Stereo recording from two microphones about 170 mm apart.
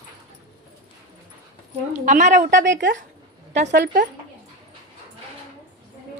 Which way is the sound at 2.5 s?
90° right.